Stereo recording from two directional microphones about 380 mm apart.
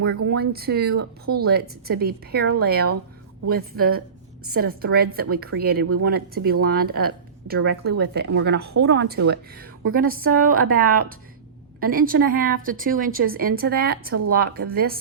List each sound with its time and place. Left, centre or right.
0.2 s a woman's voice: right